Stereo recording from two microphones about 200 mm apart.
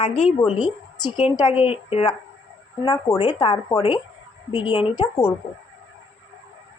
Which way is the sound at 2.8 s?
20° left (ahead or behind).